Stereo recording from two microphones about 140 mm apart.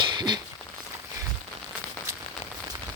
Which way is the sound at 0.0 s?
30° right (ahead or behind).